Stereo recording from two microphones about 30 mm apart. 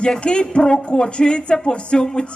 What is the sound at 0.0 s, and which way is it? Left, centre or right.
A woman's voice, left.